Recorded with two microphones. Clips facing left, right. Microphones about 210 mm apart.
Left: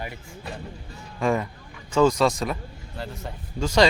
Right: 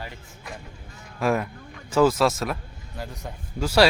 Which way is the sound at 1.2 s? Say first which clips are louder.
Even; 5° right (ahead or behind).